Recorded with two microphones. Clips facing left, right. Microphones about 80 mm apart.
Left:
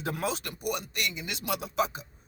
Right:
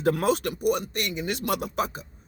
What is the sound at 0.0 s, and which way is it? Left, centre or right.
Speech, right.